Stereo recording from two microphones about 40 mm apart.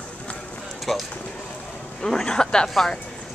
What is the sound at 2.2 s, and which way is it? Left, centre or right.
Speech, centre.